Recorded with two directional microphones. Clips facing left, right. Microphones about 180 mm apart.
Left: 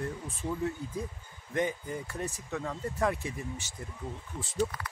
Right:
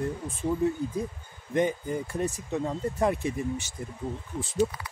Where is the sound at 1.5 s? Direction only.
20° right (ahead or behind).